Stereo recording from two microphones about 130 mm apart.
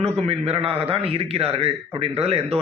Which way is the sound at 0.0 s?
55° right (ahead or behind).